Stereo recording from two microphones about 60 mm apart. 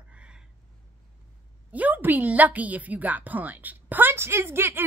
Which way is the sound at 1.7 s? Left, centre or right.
Right.